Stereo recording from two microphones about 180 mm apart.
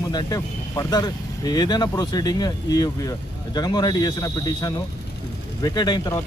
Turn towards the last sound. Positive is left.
turn(degrees=25)  # may be behind; listen again after turning